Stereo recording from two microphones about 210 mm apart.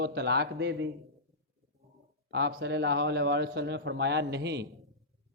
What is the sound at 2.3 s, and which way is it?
A man's voice, 55° right (ahead or behind).